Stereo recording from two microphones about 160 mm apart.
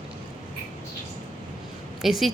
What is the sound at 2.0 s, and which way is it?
Speech, centre (ahead or behind).